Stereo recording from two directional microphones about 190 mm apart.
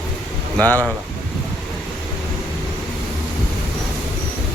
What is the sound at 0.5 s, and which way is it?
Speech, 10° left (ahead or behind).